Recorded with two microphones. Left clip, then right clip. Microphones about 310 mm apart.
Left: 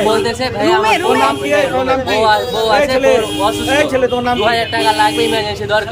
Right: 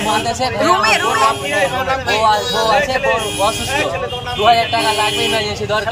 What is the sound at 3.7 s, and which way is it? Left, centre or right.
Speech, left.